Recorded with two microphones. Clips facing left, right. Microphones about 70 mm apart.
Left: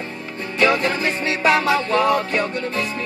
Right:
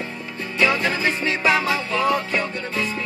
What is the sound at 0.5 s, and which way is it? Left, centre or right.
Music, left.